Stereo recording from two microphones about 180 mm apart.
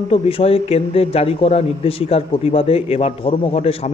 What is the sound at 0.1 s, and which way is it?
Speech, 30° left (ahead or behind).